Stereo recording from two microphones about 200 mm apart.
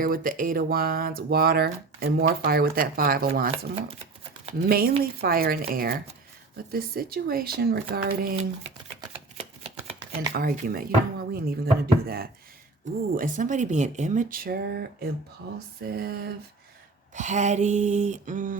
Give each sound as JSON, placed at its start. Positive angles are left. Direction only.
{"t": 0.0, "sound": "speech", "side_deg": -45}
{"t": 4.7, "sound": "speech", "side_deg": -50}
{"t": 8.6, "sound": "shuffling cards", "side_deg": -30}
{"t": 10.3, "sound": "speech", "side_deg": -50}
{"t": 16.0, "sound": "a sound", "side_deg": -55}
{"t": 17.2, "sound": "speech", "side_deg": -35}